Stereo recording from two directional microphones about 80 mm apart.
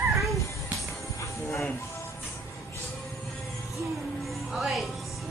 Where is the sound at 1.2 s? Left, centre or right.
Left.